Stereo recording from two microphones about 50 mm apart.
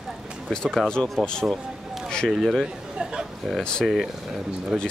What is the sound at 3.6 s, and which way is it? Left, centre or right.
Speech, centre.